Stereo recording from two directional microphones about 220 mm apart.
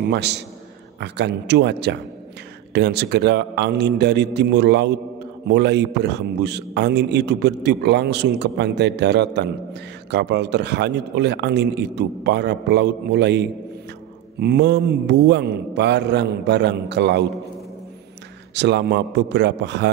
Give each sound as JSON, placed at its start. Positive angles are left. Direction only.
{"t": 0.1, "sound": "a man's voice", "side_deg": -50}
{"t": 18.5, "sound": "a man's voice", "side_deg": -50}